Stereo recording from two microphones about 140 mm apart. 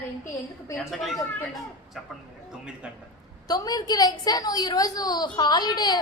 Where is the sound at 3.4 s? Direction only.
25° left (ahead or behind).